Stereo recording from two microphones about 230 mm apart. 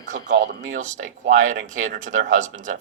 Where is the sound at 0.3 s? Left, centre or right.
Right.